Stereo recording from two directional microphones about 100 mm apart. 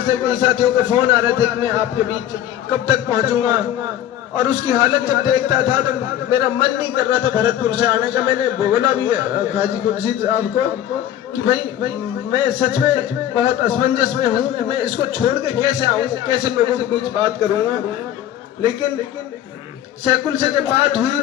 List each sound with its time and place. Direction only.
0.1 s speech: 50° right (ahead or behind)
20.1 s a man's voice: 60° right (ahead or behind)